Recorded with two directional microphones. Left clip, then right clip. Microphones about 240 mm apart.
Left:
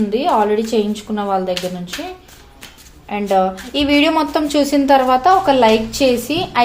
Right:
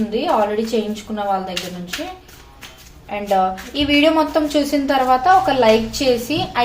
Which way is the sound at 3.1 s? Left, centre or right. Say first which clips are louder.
Left 2 dB; left.